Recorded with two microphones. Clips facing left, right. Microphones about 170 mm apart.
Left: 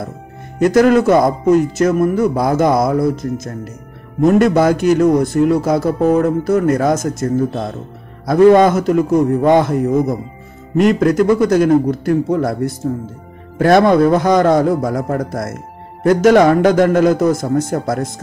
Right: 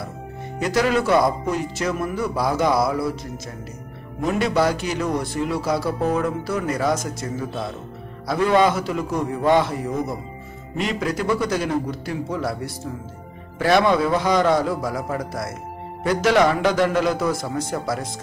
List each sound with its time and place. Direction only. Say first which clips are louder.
0.6 s a man's voice: left 10 dB; 50° left (ahead or behind)